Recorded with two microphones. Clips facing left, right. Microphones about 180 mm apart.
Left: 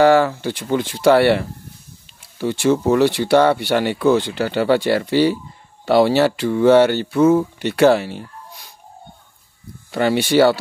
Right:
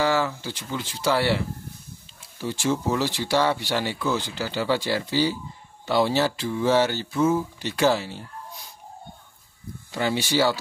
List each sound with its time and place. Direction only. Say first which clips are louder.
0.0 s speech: left 10 dB; 60° left (ahead or behind)
9.8 s speech: left 8 dB; 60° left (ahead or behind)